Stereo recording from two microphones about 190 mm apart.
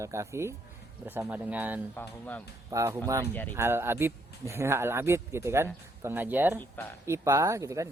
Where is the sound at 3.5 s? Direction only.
10° right (ahead or behind).